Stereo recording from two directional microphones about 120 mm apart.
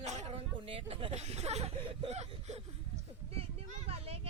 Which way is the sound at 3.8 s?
55° right (ahead or behind).